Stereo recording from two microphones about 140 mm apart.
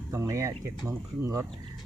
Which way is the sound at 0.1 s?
20° right (ahead or behind).